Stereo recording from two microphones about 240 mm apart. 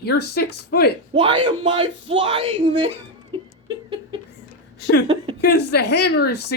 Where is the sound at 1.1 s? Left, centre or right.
Right.